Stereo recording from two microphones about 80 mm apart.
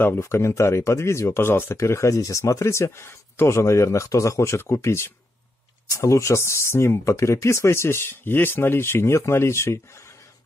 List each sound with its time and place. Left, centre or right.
0.2 s speech: left